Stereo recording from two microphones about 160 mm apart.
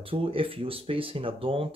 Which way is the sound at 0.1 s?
35° right (ahead or behind).